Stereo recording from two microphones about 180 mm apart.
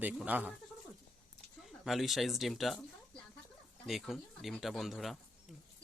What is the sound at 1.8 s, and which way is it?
Speech, centre (ahead or behind).